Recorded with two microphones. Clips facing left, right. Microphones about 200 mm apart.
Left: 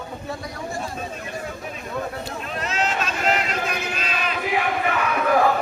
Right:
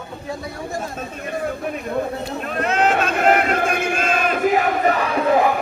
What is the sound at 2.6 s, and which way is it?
Battle cry, 55° right (ahead or behind).